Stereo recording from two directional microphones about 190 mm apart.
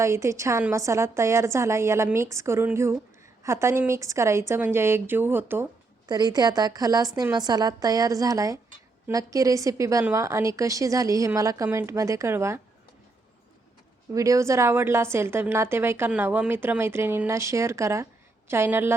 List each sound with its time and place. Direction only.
0.0 s a woman's voice: 15° right (ahead or behind)
6.1 s a woman's voice: 20° right (ahead or behind)
14.1 s a woman's voice: 15° right (ahead or behind)